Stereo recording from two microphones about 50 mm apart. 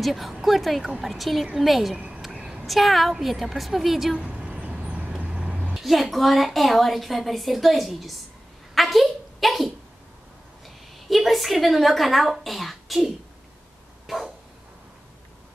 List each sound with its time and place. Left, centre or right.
0.0 s a woman's voice: centre
2.0 s a sound: centre
2.6 s a woman's voice: centre
4.2 s vehicle: centre
5.3 s vehicle: centre
5.8 s a woman's voice: centre
8.7 s a sound: centre
11.1 s a woman's voice: centre
14.0 s dog: centre